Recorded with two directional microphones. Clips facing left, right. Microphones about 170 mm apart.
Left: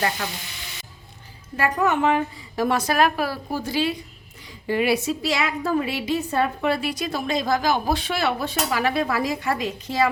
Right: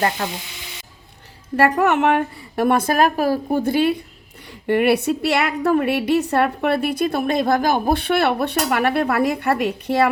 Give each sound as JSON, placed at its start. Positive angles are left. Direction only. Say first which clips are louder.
{"t": 0.2, "sound": "frying", "louder": "right 5 dB", "side_deg": -50}
{"t": 1.5, "sound": "a woman's voice", "louder": "right 5 dB", "side_deg": -70}